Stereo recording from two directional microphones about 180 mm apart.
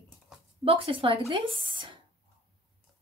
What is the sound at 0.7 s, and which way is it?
A woman's voice, 30° right (ahead or behind).